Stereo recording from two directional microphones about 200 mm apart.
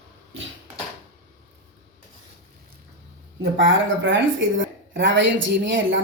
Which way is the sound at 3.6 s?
70° right (ahead or behind).